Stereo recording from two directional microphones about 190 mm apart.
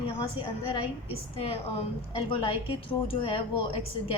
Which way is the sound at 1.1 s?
30° left (ahead or behind).